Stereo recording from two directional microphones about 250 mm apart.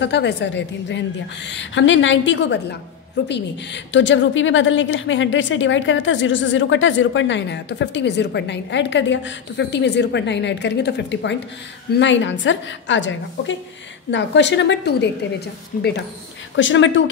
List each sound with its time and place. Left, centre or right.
0.0 s a woman's voice: left
15.7 s speech: left
16.5 s a woman's voice: left